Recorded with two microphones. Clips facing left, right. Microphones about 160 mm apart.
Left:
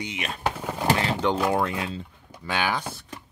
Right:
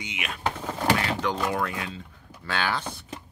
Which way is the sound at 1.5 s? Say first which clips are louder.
Left 4 dB; 25° left (ahead or behind).